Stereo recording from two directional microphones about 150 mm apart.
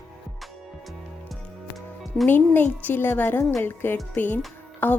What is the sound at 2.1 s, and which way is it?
A woman's voice, 5° left (ahead or behind).